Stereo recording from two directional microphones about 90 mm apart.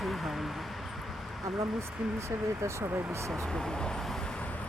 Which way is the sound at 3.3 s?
5° left (ahead or behind).